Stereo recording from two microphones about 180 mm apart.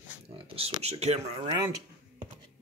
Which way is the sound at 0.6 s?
35° right (ahead or behind).